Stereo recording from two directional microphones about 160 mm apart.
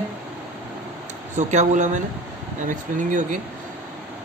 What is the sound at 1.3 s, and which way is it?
Speech, 50° right (ahead or behind).